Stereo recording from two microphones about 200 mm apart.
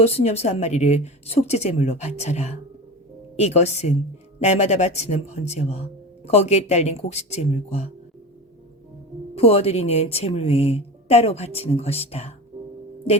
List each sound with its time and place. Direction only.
0.0 s speech: 30° left (ahead or behind)
9.3 s speech: 30° left (ahead or behind)